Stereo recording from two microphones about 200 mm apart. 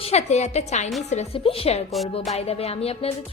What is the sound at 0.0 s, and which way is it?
A woman's voice, 35° left (ahead or behind).